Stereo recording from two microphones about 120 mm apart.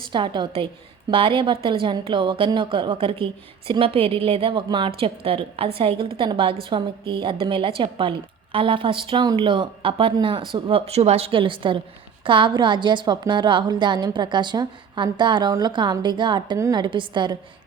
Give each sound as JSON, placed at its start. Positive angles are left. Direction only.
{"t": 0.1, "sound": "a woman's voice", "side_deg": -40}